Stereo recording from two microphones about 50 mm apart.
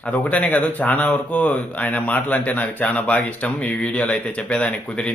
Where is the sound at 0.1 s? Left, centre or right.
Left.